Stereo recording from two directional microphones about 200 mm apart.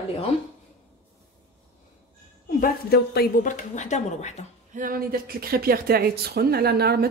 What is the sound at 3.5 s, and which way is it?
Speech, 35° left (ahead or behind).